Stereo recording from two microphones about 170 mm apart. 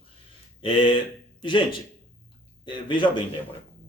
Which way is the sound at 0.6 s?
30° left (ahead or behind).